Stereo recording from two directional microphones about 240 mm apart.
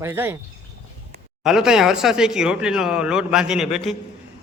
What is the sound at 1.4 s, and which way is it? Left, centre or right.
Speech, centre.